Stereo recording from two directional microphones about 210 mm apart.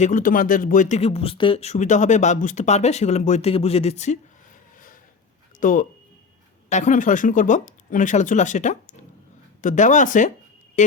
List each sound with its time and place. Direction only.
0.0 s speech: 40° left (ahead or behind)
5.5 s speech: 40° left (ahead or behind)